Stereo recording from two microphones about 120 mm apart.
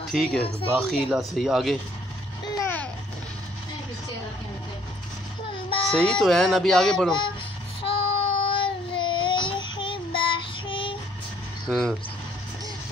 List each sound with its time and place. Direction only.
0.1 s speech: centre (ahead or behind)
2.5 s a sound: 25° left (ahead or behind)
5.9 s speech: 5° left (ahead or behind)
7.8 s child singing: 50° left (ahead or behind)
11.6 s speech: centre (ahead or behind)